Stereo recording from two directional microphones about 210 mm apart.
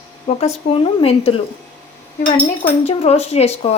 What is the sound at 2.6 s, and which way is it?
A woman's voice, 30° left (ahead or behind).